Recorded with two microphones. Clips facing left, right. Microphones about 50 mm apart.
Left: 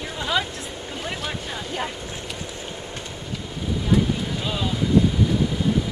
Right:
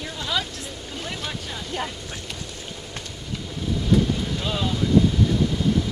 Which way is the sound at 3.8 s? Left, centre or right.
Centre.